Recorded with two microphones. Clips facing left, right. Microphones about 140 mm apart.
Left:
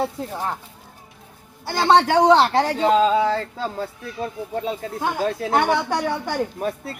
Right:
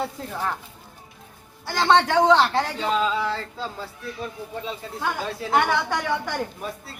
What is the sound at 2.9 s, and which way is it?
Speech, 45° left (ahead or behind).